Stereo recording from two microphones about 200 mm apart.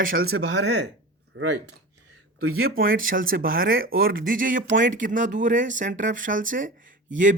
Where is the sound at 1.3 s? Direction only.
90° right.